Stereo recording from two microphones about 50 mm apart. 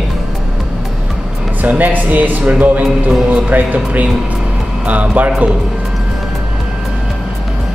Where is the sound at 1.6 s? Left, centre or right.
Right.